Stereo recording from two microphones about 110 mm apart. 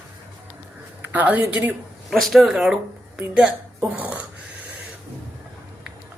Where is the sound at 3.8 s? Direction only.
15° right (ahead or behind).